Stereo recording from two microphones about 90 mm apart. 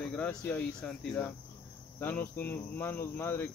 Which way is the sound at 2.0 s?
20° left (ahead or behind).